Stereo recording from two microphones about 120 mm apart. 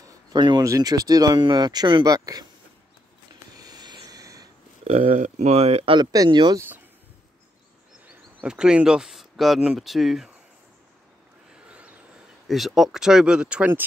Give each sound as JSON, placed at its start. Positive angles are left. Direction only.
{"t": 0.0, "sound": "a sound", "side_deg": -40}
{"t": 0.7, "sound": "speech", "side_deg": -30}
{"t": 3.5, "sound": "train", "side_deg": -35}
{"t": 4.8, "sound": "speech", "side_deg": -60}
{"t": 5.9, "sound": "speech", "side_deg": -40}
{"t": 8.4, "sound": "speech", "side_deg": -5}
{"t": 11.5, "sound": "a sound", "side_deg": -10}
{"t": 12.4, "sound": "speech", "side_deg": 0}